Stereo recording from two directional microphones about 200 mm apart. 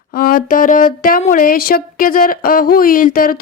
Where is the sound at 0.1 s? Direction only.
45° left (ahead or behind).